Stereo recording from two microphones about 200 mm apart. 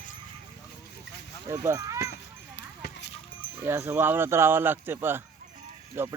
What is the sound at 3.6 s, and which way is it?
Speech, 10° right (ahead or behind).